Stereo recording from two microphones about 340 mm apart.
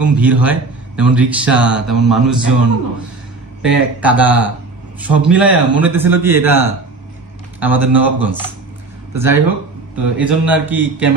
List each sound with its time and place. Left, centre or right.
0.0 s a man's voice: centre
3.6 s a man's voice: centre